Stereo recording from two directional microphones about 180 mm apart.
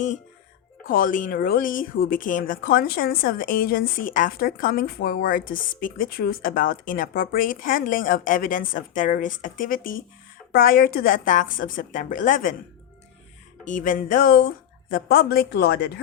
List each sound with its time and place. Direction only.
0.9 s speech: 50° left (ahead or behind)
13.7 s speech: 45° left (ahead or behind); by 15.9 s 65° left (ahead or behind)